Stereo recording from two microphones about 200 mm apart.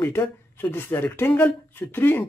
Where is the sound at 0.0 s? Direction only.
10° left (ahead or behind).